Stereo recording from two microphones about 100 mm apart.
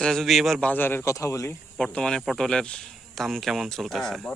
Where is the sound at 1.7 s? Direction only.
10° left (ahead or behind).